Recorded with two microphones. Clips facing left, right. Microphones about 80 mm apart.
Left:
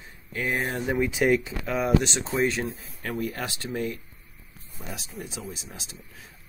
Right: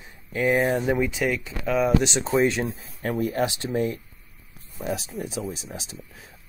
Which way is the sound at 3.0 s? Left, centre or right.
Right.